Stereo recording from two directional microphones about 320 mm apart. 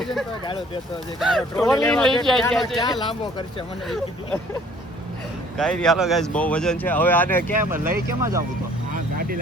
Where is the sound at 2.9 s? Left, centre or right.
Centre.